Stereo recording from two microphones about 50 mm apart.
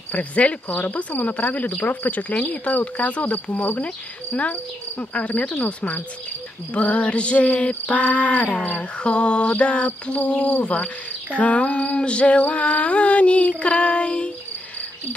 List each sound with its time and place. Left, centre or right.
0.1 s speech: left
5.1 s female singing: left